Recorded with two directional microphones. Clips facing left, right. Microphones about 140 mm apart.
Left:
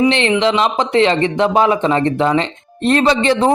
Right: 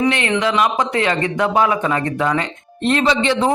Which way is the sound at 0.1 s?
25° left (ahead or behind).